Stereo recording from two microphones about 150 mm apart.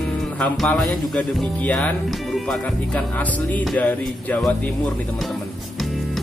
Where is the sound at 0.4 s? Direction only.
5° left (ahead or behind).